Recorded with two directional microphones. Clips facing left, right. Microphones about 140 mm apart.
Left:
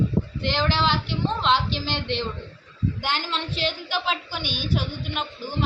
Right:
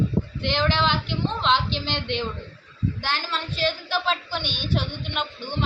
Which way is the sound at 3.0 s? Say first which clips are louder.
Left 1 dB; 20° left (ahead or behind).